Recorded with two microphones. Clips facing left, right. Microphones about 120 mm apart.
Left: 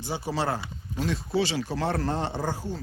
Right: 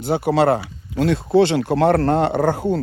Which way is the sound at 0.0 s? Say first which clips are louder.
Right 12 dB; 65° right (ahead or behind).